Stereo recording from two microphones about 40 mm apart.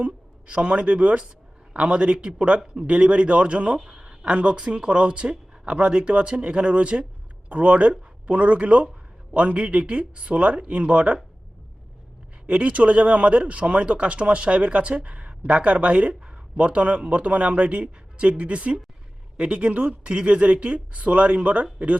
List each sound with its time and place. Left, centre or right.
0.0 s speech: right
12.5 s speech: right